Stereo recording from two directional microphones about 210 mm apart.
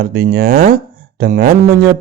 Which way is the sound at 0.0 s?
45° right (ahead or behind).